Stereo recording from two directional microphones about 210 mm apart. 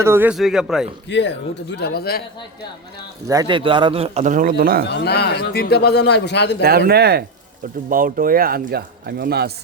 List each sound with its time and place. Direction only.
0.0 s speech: 10° right (ahead or behind)
1.1 s a man's voice: 60° left (ahead or behind)
3.2 s a man's voice: 20° right (ahead or behind); by 4.9 s 45° right (ahead or behind)
4.9 s a man's voice: 50° left (ahead or behind)
6.6 s speech: 45° right (ahead or behind)